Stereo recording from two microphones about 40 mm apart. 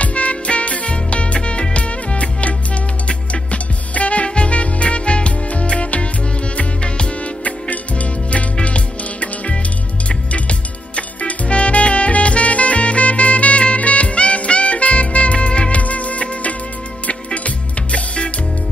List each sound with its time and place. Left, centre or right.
0.0 s music: left
11.0 s music: left
17.9 s music: left